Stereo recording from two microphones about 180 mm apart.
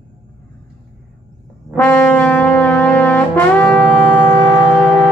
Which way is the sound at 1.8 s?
10° left (ahead or behind).